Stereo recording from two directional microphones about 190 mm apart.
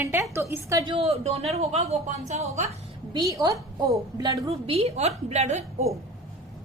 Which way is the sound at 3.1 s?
20° right (ahead or behind).